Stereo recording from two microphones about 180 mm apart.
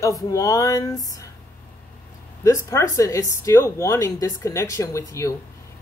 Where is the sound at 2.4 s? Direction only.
15° left (ahead or behind).